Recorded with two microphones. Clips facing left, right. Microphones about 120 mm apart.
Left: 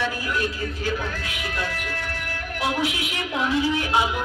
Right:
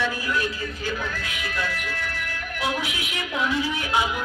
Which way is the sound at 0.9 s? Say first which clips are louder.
Left 1 dB; 30° left (ahead or behind).